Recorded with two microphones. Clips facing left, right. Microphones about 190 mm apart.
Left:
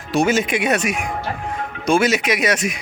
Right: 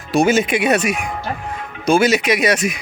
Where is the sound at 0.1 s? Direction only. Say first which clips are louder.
Right 3 dB; 10° right (ahead or behind).